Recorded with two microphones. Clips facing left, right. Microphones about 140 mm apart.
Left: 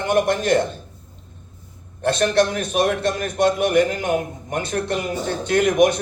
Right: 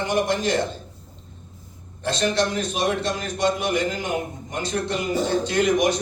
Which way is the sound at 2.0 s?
55° left (ahead or behind).